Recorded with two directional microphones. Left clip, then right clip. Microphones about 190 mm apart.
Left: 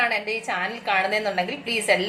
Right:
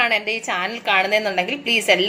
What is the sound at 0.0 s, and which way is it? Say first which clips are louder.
A woman's voice: right 4 dB; 50° right (ahead or behind).